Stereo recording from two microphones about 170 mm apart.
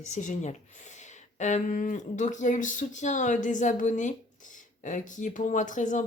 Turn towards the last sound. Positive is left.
turn(degrees=45)  # may be behind; listen again after turning